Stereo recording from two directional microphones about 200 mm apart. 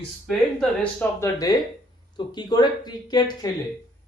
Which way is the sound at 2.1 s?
20° left (ahead or behind).